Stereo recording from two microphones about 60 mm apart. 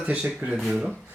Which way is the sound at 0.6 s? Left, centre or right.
Centre.